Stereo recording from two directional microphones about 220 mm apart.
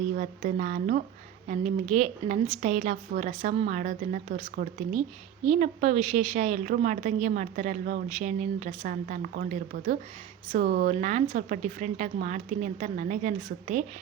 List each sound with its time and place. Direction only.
0.2 s a woman's voice: 40° right (ahead or behind)